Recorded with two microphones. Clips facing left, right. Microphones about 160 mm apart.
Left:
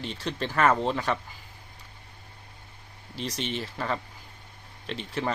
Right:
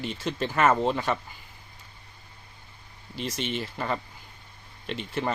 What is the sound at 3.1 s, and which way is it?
Speech, 35° left (ahead or behind).